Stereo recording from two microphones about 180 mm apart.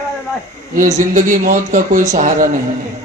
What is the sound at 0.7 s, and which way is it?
A man's voice, 45° right (ahead or behind).